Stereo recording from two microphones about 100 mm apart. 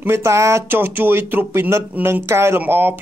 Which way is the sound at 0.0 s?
25° right (ahead or behind).